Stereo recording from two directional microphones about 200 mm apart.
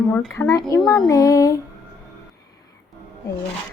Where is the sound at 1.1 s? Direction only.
15° left (ahead or behind).